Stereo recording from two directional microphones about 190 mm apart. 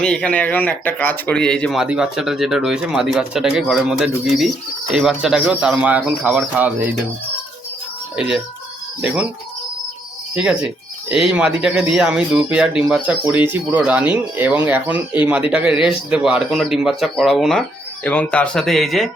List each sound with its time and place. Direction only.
0.0 s speech: 5° left (ahead or behind)
8.1 s speech: 5° right (ahead or behind)
10.3 s speech: 5° right (ahead or behind)